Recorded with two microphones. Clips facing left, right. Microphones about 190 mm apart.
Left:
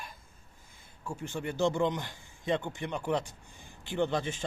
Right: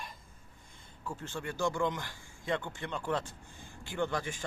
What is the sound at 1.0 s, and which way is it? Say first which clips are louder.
A man's voice: left 3 dB; 10° left (ahead or behind).